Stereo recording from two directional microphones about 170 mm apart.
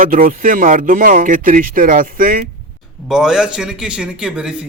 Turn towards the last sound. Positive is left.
turn(degrees=-5)  # may be behind; listen again after turning